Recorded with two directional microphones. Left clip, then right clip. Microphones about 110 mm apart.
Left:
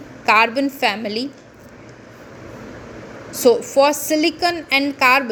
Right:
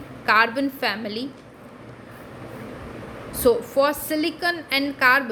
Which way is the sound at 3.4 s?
25° left (ahead or behind).